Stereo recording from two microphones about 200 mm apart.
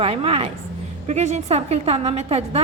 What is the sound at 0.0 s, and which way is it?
A woman's voice, 30° right (ahead or behind).